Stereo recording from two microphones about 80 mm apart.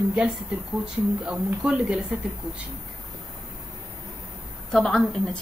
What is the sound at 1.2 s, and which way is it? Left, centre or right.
Speech, centre.